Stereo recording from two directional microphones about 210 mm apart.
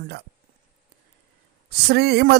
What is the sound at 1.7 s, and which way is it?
Speech, 50° right (ahead or behind).